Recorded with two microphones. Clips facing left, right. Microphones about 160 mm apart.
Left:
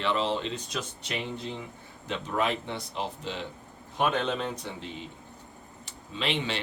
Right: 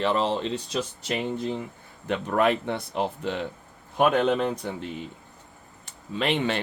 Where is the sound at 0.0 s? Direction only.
40° right (ahead or behind).